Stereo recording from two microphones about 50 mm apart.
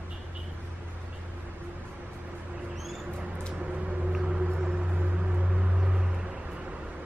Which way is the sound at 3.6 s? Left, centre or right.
Right.